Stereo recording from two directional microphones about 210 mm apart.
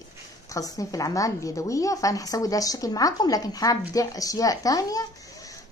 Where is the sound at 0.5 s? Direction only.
15° left (ahead or behind).